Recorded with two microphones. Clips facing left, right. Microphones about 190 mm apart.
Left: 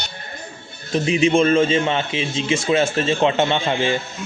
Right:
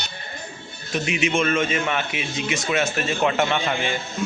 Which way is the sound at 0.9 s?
30° left (ahead or behind).